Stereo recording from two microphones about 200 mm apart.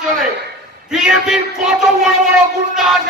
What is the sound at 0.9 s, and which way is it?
Speech, centre (ahead or behind).